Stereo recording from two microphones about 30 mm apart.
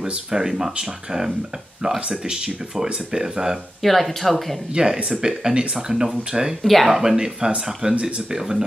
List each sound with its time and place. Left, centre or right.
0.0 s speech: centre
3.8 s speech: centre
4.7 s speech: right
5.9 s speech: centre
6.6 s speech: centre
6.9 s speech: centre